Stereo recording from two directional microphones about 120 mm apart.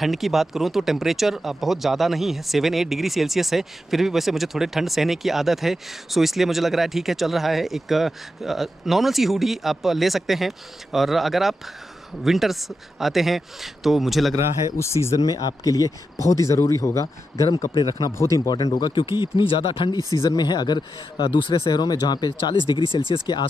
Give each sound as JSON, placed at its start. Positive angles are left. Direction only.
{"t": 0.0, "sound": "speech", "side_deg": 0}
{"t": 14.8, "sound": "speech", "side_deg": 25}
{"t": 17.7, "sound": "speech", "side_deg": 40}
{"t": 18.1, "sound": "speech", "side_deg": 25}
{"t": 20.2, "sound": "speech", "side_deg": 35}